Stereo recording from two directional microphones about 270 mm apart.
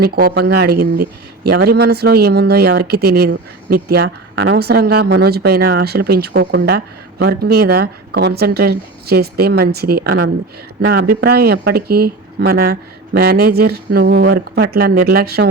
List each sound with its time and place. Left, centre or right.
0.0 s speech: right